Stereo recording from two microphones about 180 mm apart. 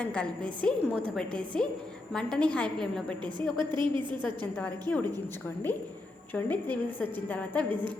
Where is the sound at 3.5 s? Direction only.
25° right (ahead or behind).